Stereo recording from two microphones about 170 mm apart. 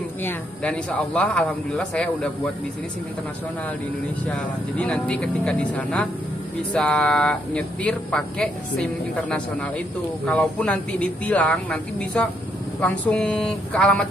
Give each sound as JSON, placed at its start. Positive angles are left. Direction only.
{"t": 0.2, "sound": "a man's voice", "side_deg": 10}
{"t": 4.3, "sound": "a man's voice", "side_deg": 5}